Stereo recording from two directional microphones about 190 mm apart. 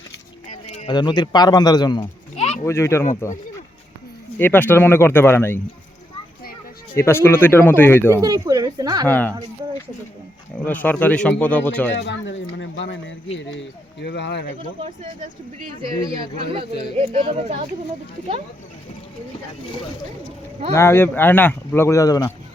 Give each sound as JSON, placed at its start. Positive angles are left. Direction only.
{"t": 0.4, "sound": "a sound", "side_deg": 35}
{"t": 0.9, "sound": "a man's voice", "side_deg": 20}
{"t": 2.3, "sound": "a sound", "side_deg": 30}
{"t": 2.6, "sound": "speech", "side_deg": 15}
{"t": 4.4, "sound": "speech", "side_deg": 10}
{"t": 6.9, "sound": "speech", "side_deg": 15}
{"t": 8.2, "sound": "speech", "side_deg": -20}
{"t": 9.0, "sound": "speech", "side_deg": 10}
{"t": 10.7, "sound": "speech", "side_deg": 10}
{"t": 11.9, "sound": "speech", "side_deg": 65}
{"t": 16.3, "sound": "speech", "side_deg": -30}
{"t": 20.7, "sound": "speech", "side_deg": 15}